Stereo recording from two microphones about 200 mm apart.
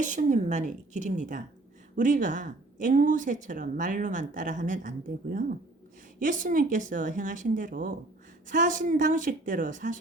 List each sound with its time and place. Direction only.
0.0 s speech: 40° right (ahead or behind)